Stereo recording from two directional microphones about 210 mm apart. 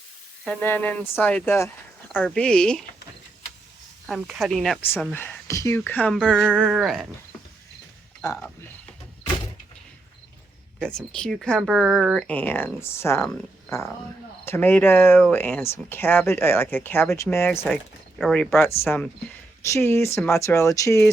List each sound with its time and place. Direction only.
0.4 s speech: 5° left (ahead or behind)
4.0 s speech: centre (ahead or behind)
8.2 s speech: 15° left (ahead or behind)
10.8 s speech: 5° left (ahead or behind)